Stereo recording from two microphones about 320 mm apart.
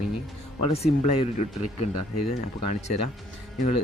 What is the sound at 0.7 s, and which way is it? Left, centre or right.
Speech, centre.